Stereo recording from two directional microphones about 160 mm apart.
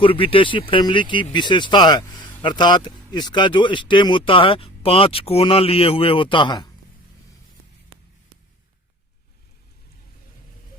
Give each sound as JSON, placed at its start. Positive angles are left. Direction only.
{"t": 0.0, "sound": "speech", "side_deg": 35}